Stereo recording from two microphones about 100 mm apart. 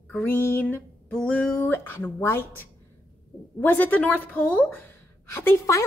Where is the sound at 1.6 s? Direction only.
20° left (ahead or behind).